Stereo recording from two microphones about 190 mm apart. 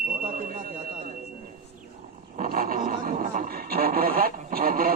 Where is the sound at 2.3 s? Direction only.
50° right (ahead or behind).